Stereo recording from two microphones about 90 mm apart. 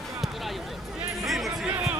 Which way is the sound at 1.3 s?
5° right (ahead or behind).